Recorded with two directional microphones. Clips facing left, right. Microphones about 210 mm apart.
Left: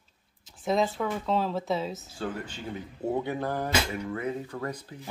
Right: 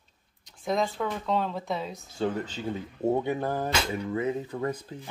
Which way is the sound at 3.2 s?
15° right (ahead or behind).